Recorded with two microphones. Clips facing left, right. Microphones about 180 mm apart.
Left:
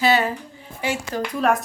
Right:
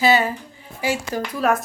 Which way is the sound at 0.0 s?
5° right (ahead or behind).